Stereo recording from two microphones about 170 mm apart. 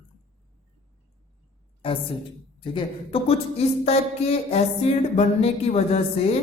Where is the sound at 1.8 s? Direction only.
30° left (ahead or behind).